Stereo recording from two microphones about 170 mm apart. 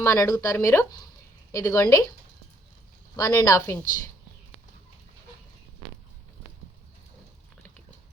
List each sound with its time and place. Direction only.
0.0 s speech: 15° left (ahead or behind)
3.2 s a woman's voice: 20° left (ahead or behind)